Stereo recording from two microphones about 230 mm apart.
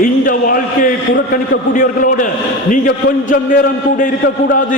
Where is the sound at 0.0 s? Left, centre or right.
Left.